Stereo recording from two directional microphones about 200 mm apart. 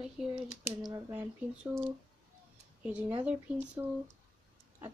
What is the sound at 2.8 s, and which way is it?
Speech, 5° right (ahead or behind).